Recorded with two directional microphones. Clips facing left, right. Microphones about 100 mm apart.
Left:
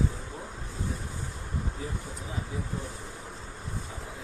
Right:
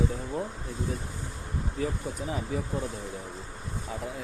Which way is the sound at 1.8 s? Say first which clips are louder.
Right 12 dB; 90° right.